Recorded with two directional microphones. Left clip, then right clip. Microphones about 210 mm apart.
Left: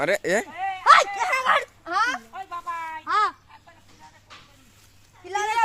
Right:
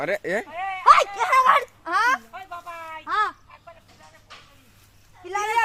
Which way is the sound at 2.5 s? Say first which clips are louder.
Left 6 dB; 40° right (ahead or behind).